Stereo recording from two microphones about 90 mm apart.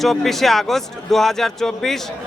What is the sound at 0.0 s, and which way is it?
A man's voice, 5° left (ahead or behind).